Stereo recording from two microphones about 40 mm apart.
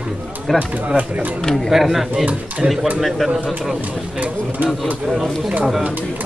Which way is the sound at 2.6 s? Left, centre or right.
Right.